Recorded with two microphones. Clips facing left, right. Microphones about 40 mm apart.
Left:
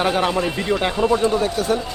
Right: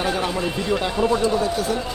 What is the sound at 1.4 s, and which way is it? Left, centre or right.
Speech, left.